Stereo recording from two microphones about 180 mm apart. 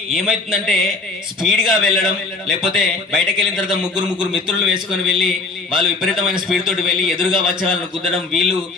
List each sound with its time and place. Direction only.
0.1 s a man's voice: centre (ahead or behind)